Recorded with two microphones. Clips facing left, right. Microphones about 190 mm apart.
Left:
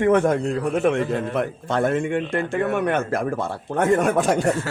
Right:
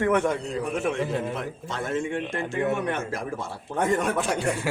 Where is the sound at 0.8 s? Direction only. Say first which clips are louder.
Left 6 dB; 60° left (ahead or behind).